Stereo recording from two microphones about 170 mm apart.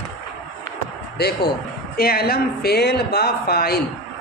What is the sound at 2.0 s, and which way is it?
Speech, 65° left (ahead or behind).